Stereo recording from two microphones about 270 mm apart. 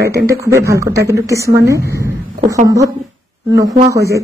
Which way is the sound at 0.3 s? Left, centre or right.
Centre.